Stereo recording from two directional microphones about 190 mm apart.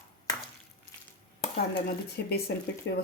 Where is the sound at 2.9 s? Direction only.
70° left (ahead or behind).